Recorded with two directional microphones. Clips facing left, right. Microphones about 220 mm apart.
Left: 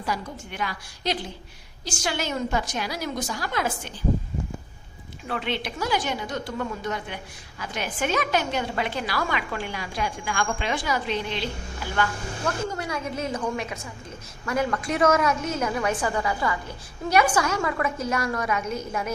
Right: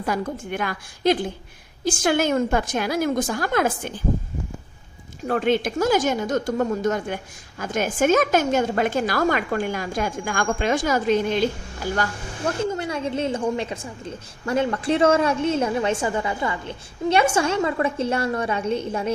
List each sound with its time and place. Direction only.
0.0 s a woman's voice: 50° right (ahead or behind)
5.2 s a woman's voice: 45° right (ahead or behind)
12.5 s a woman's voice: 25° right (ahead or behind)